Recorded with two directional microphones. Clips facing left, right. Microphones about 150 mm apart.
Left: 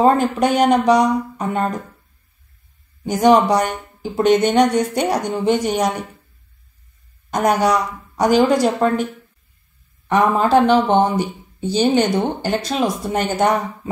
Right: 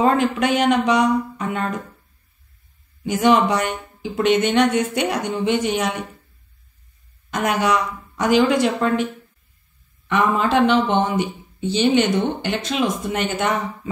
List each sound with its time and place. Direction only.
0.0 s speech: 40° left (ahead or behind)
3.0 s speech: 40° left (ahead or behind)
7.2 s speech: 40° left (ahead or behind)
10.0 s speech: 40° left (ahead or behind)